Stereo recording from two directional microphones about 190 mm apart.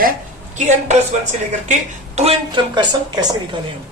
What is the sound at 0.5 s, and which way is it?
Speech, 40° right (ahead or behind).